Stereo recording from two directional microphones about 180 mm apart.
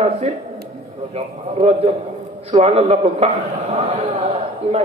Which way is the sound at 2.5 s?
35° right (ahead or behind).